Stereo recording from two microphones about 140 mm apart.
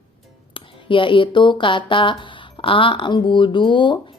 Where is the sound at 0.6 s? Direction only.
35° left (ahead or behind).